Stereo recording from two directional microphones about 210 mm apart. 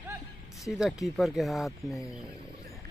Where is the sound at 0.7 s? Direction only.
Centre (ahead or behind).